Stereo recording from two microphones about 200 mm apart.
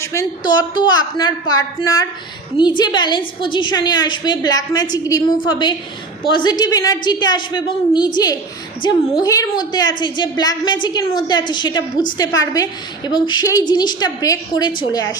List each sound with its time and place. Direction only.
0.0 s a woman's voice: 15° left (ahead or behind)
13.1 s a woman's voice: 25° left (ahead or behind)